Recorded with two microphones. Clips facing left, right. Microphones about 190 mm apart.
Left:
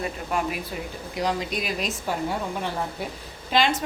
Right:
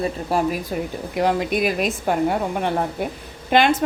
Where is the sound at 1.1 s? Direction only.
55° right (ahead or behind).